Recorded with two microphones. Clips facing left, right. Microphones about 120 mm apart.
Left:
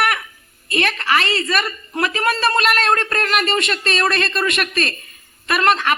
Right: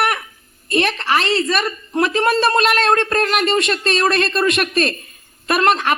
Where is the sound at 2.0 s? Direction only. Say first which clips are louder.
Right 3 dB; 40° right (ahead or behind).